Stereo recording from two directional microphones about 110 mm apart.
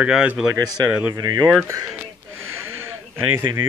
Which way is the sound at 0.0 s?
10° right (ahead or behind).